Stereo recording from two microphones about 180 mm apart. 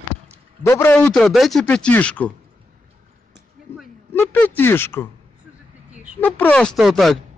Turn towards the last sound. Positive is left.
turn(degrees=0)  # may be behind; listen again after turning